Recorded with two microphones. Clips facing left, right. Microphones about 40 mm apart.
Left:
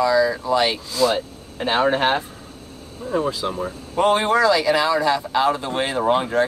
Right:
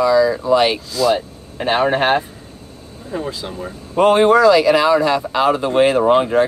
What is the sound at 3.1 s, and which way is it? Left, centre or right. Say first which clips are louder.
Speech: left 2 dB; centre.